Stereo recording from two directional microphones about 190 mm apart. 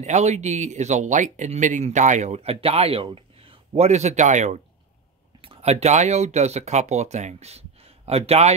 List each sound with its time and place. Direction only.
0.0 s speech: 35° right (ahead or behind)